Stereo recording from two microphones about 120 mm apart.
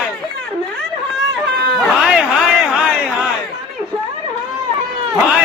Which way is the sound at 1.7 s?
5° right (ahead or behind).